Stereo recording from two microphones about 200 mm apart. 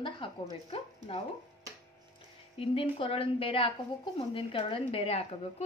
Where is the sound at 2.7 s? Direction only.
30° left (ahead or behind).